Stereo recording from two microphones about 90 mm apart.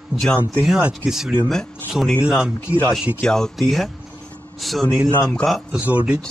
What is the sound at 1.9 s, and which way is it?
Speech, 5° right (ahead or behind).